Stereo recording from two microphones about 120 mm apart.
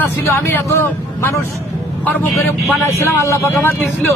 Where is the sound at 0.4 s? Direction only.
20° left (ahead or behind).